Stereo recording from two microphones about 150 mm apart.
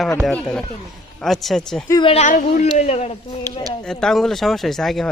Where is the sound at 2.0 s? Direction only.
40° left (ahead or behind).